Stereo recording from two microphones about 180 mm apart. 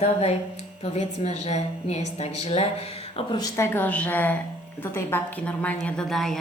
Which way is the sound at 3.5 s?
15° left (ahead or behind).